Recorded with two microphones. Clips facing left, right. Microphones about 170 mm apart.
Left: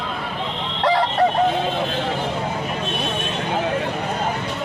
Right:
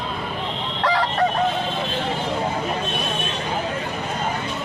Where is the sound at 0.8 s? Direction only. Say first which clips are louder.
Left 3 dB; 30° left (ahead or behind).